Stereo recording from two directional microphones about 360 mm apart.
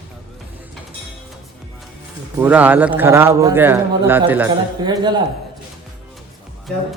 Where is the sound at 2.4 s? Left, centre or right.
Centre.